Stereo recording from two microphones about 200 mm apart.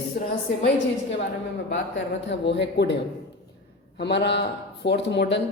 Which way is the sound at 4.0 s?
60° left (ahead or behind).